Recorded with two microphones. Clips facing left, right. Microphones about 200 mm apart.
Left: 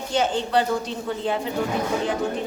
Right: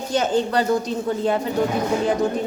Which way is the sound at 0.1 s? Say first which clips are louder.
Right 2 dB; 40° right (ahead or behind).